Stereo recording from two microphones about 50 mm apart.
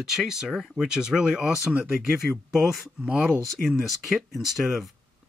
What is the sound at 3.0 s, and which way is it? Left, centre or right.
Speech, centre.